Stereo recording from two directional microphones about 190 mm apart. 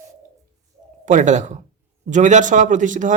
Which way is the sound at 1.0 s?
40° right (ahead or behind).